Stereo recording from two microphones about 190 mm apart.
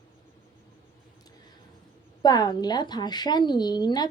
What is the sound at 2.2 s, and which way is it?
A woman's voice, 20° left (ahead or behind).